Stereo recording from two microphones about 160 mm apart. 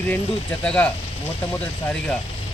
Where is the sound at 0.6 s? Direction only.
5° left (ahead or behind).